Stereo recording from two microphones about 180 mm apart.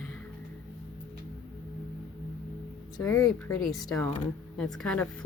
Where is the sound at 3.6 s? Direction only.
Centre (ahead or behind).